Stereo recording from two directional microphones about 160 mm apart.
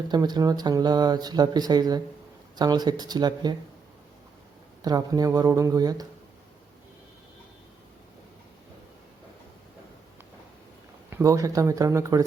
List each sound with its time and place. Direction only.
0.1 s speech: 25° right (ahead or behind)
4.8 s speech: 25° right (ahead or behind)
11.1 s speech: 20° right (ahead or behind)